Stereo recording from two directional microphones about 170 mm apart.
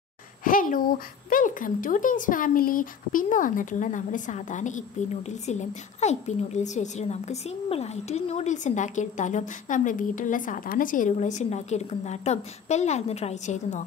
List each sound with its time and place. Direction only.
0.4 s speech: 55° left (ahead or behind)